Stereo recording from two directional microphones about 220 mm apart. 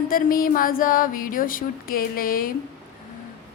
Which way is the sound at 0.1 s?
40° left (ahead or behind).